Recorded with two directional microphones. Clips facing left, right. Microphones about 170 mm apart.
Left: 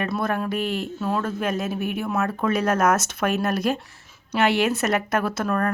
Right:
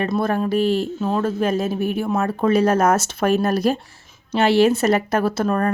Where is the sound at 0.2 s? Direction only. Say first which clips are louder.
Right 5 dB; 30° right (ahead or behind).